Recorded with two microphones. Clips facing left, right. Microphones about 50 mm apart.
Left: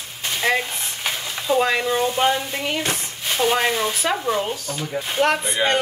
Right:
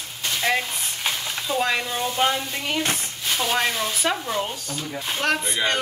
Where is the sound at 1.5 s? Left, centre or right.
Centre.